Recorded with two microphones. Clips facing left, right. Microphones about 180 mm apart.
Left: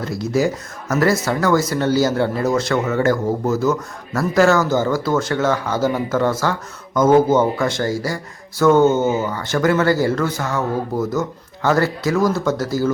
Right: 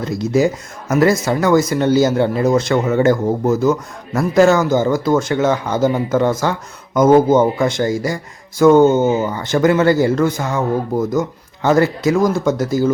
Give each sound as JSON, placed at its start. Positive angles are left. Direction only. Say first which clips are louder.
{"t": 0.0, "sound": "speech", "louder": "right 3 dB", "side_deg": -20}